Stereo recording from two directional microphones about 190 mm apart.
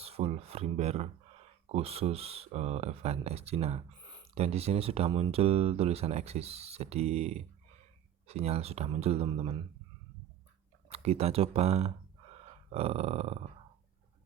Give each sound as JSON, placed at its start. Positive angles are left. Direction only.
{"t": 0.0, "sound": "speech", "side_deg": -30}
{"t": 10.8, "sound": "speech", "side_deg": -35}